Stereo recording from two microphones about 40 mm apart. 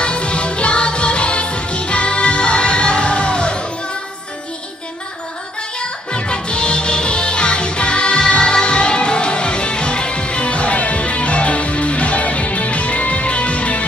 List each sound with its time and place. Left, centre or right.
0.0 s music: left
5.6 s music: left